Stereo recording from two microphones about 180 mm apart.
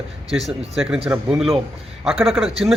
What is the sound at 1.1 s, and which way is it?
A man's voice, 5° right (ahead or behind).